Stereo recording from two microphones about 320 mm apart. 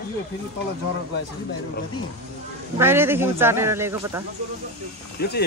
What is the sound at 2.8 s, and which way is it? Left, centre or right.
A man's voice, centre.